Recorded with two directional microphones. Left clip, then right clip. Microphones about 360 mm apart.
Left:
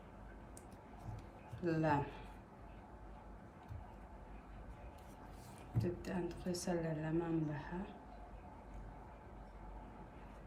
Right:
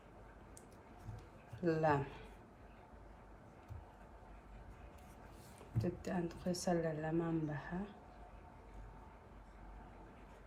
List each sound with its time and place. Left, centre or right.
1.6 s speech: centre
5.8 s speech: centre